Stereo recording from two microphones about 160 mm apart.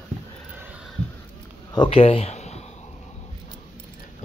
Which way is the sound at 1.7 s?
30° left (ahead or behind).